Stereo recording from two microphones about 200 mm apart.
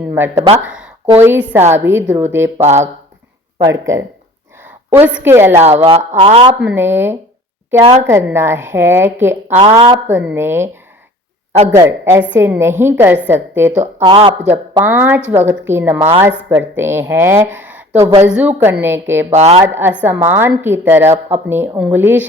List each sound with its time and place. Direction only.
0.1 s a woman's voice: 10° right (ahead or behind)
3.6 s a woman's voice: 15° right (ahead or behind)
5.5 s speech: 30° right (ahead or behind)
6.6 s a woman's voice: 10° right (ahead or behind)
9.6 s speech: 25° right (ahead or behind)
10.1 s a woman's voice: 10° right (ahead or behind)
11.7 s a woman's voice: 15° right (ahead or behind)
14.1 s speech: 25° right (ahead or behind)
14.4 s a woman's voice: 10° right (ahead or behind)
17.9 s speech: 30° right (ahead or behind)
18.3 s a woman's voice: 5° right (ahead or behind)
19.3 s a woman's voice: 35° right (ahead or behind)
19.5 s a woman's voice: 10° right (ahead or behind)